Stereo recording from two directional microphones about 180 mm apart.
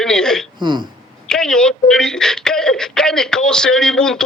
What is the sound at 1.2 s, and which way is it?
A man's voice, 5° left (ahead or behind).